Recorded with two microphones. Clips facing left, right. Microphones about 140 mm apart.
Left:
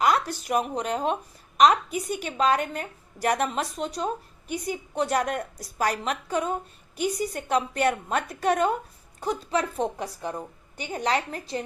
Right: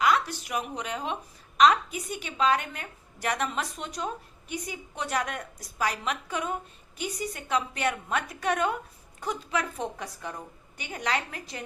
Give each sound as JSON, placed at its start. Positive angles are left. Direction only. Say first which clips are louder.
{"t": 0.0, "sound": "a woman's voice", "louder": "left 2 dB", "side_deg": 40}